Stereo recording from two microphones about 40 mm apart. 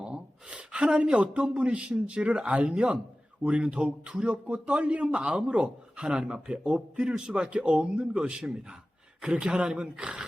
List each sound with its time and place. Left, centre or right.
0.0 s a man's voice: right